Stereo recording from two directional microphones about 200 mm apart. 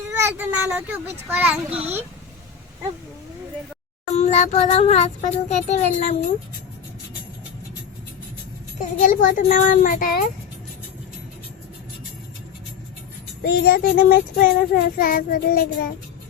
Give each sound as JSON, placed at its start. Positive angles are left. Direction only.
{"t": 0.2, "sound": "a child's voice", "side_deg": -10}
{"t": 4.1, "sound": "music", "side_deg": 35}
{"t": 9.0, "sound": "child singing", "side_deg": 40}
{"t": 13.4, "sound": "child singing", "side_deg": 55}